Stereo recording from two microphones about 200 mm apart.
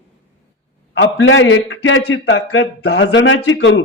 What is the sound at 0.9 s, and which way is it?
A man's voice, 80° left.